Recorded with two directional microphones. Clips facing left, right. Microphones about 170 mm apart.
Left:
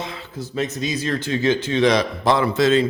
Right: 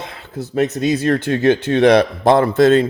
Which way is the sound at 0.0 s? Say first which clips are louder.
Right 2 dB; 55° right (ahead or behind).